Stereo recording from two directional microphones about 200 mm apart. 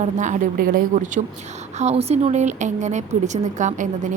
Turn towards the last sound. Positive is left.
turn(degrees=-40)  # may be behind; listen again after turning